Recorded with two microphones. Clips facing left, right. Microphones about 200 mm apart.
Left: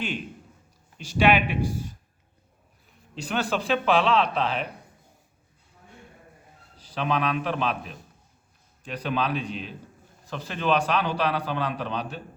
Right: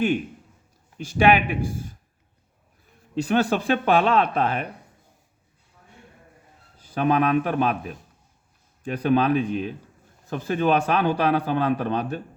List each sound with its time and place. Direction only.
1.0 s a man's voice: 50° right (ahead or behind)
3.2 s a man's voice: 50° right (ahead or behind)
6.7 s a man's voice: 50° right (ahead or behind)